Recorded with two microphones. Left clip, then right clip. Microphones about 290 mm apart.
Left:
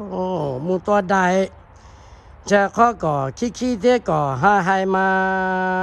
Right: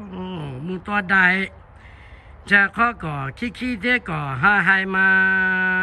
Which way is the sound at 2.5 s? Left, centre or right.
Centre.